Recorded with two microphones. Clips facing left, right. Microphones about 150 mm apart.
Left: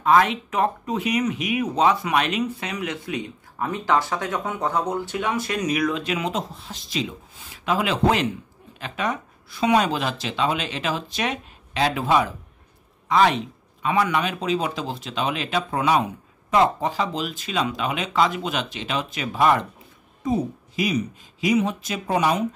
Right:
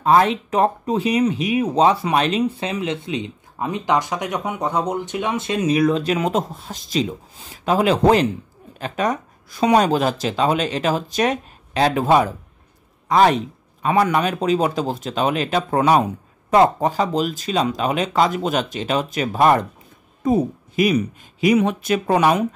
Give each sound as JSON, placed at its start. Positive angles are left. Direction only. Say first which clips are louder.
{"t": 0.0, "sound": "speech", "louder": "right 3 dB", "side_deg": -35}
{"t": 20.2, "sound": "speech", "louder": "right 5 dB", "side_deg": -55}